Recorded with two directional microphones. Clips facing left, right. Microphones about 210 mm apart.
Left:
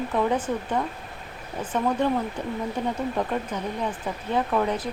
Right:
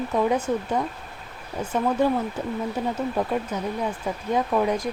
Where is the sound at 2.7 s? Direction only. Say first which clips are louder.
Right 1 dB; 5° right (ahead or behind).